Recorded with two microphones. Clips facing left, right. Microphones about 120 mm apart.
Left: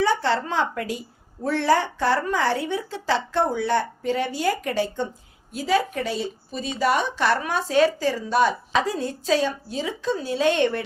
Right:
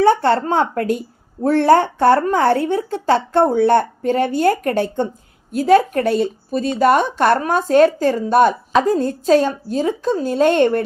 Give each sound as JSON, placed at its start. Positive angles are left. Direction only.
{"t": 0.0, "sound": "a woman's voice", "side_deg": -55}